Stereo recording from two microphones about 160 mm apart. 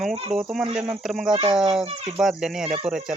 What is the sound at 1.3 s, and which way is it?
Speech, 30° right (ahead or behind).